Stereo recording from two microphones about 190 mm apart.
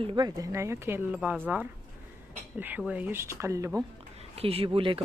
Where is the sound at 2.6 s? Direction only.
10° right (ahead or behind).